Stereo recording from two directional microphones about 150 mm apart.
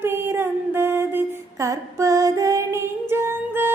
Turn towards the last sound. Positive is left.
turn(degrees=-15)  # may be behind; listen again after turning